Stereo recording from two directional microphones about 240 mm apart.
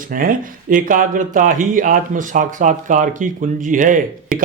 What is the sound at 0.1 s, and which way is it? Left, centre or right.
Speech, right.